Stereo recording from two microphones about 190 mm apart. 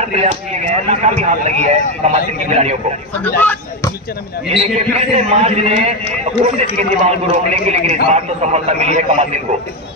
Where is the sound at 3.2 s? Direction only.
10° left (ahead or behind).